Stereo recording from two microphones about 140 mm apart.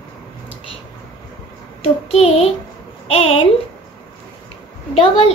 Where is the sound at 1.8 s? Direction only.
45° left (ahead or behind).